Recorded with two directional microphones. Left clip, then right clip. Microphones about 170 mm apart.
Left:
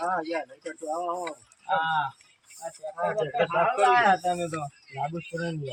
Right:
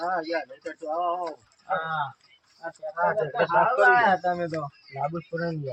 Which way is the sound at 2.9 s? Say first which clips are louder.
Right 2 dB; 5° left (ahead or behind).